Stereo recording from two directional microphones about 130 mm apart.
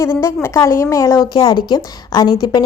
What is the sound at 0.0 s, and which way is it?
A woman's voice, 20° left (ahead or behind).